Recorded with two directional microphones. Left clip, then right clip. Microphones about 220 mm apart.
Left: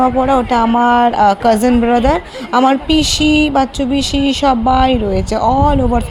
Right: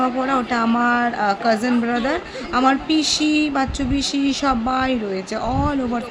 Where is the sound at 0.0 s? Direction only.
20° left (ahead or behind).